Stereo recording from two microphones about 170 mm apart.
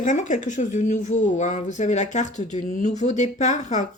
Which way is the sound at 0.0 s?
45° left (ahead or behind).